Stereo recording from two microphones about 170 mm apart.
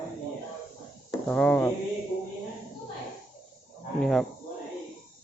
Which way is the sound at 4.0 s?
Centre (ahead or behind).